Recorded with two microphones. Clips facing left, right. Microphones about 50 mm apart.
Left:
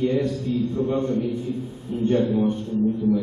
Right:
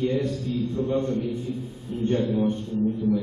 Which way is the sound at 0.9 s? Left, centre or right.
Left.